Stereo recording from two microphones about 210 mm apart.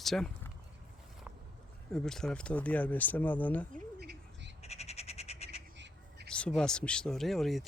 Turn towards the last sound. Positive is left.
turn(degrees=0)  # may be behind; listen again after turning